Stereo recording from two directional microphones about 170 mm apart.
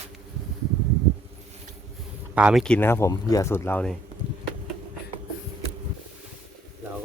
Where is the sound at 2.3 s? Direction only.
5° right (ahead or behind).